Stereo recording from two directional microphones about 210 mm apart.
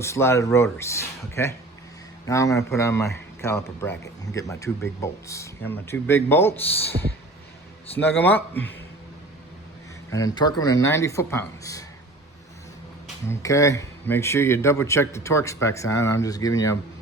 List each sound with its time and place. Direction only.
0.0 s a man's voice: 10° left (ahead or behind)
10.2 s a man's voice: 20° left (ahead or behind)
13.2 s a man's voice: 15° left (ahead or behind)